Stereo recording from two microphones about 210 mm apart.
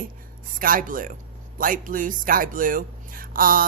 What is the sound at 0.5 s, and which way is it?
A woman's voice, 40° right (ahead or behind).